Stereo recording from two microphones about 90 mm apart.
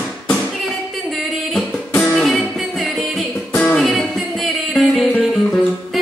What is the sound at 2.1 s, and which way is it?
Music, 5° left (ahead or behind).